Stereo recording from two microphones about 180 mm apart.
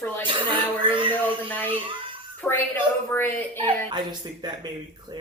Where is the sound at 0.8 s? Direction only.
30° right (ahead or behind).